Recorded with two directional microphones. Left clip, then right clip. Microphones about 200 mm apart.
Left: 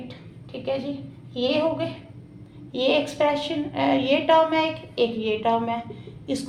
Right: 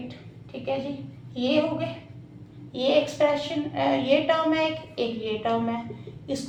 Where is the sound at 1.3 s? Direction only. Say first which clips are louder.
Left 2 dB; 45° left (ahead or behind).